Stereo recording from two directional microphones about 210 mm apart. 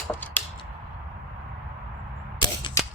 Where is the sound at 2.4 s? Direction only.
20° left (ahead or behind).